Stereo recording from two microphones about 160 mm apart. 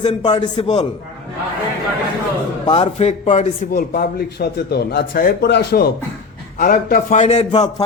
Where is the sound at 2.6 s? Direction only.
35° left (ahead or behind).